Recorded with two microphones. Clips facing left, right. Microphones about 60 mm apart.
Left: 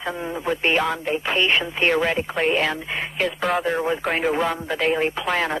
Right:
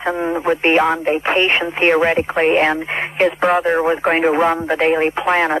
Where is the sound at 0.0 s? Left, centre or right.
Right.